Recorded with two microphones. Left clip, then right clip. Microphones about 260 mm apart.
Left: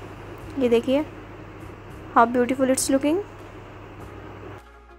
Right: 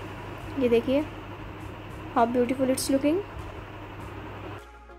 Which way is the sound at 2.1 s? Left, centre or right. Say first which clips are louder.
Left 5 dB; centre.